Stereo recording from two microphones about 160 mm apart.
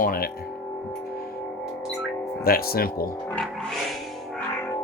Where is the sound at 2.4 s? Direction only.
70° left (ahead or behind).